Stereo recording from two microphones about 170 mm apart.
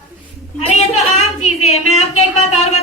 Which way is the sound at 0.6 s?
40° left (ahead or behind).